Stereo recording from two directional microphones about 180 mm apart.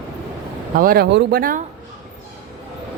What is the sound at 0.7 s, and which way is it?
Speech, 55° right (ahead or behind).